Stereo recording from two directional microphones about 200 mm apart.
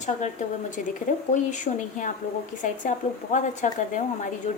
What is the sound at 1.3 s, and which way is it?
A woman's voice, 40° left (ahead or behind).